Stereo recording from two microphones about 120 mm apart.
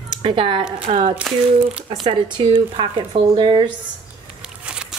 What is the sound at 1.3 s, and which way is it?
Speech, centre (ahead or behind).